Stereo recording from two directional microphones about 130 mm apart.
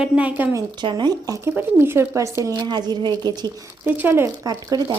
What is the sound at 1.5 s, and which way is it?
A woman's voice, 15° right (ahead or behind).